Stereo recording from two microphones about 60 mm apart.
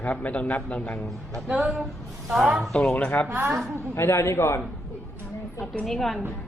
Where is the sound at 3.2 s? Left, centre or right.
Right.